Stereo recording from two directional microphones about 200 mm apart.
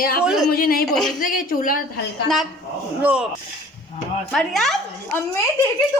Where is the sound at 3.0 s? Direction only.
5° right (ahead or behind).